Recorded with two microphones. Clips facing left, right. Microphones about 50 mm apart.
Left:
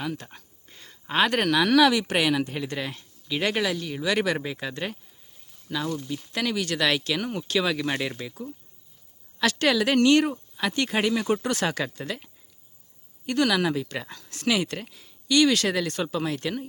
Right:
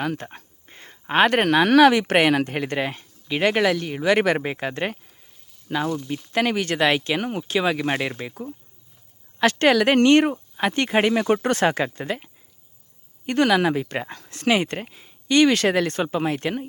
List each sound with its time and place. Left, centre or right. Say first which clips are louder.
0.0 s speech: right 5 dB; right
3.9 s speech: right 4 dB; right